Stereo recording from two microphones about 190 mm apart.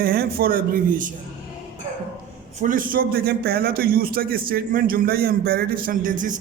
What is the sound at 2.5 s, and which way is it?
Speech, 45° right (ahead or behind).